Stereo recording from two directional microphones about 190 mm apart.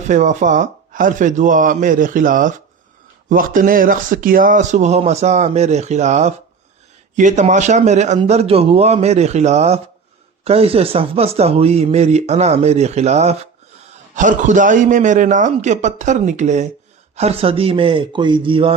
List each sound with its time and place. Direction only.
0.0 s a man's voice: 40° right (ahead or behind)